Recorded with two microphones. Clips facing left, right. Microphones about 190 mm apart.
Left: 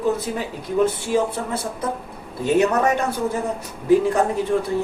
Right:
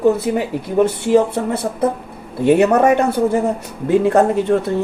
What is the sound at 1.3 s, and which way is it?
Speech, 60° right (ahead or behind).